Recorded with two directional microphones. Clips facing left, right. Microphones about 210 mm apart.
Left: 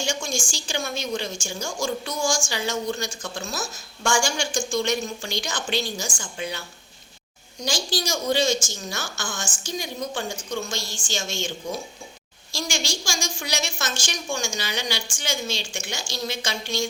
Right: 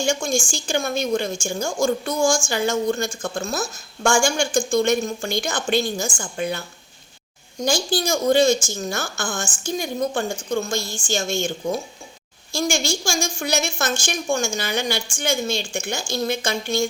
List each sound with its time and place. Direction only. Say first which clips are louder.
0.0 s a woman's voice: right 6 dB; 50° right (ahead or behind)